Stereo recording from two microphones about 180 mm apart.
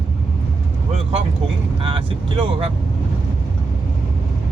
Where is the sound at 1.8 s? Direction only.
30° right (ahead or behind).